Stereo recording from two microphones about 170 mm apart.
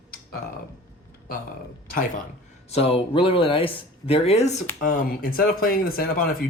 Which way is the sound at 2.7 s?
35° left (ahead or behind).